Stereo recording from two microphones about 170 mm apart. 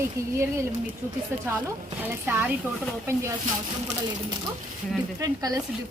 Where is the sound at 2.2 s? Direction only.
10° right (ahead or behind).